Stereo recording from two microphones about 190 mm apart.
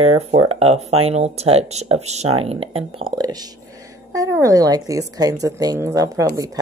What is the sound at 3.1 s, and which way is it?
Speech, 20° right (ahead or behind).